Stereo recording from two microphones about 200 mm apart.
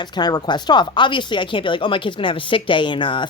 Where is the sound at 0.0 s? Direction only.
20° left (ahead or behind).